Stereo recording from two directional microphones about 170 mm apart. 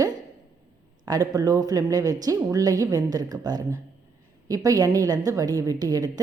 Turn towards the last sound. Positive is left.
turn(degrees=-20)  # may be behind; listen again after turning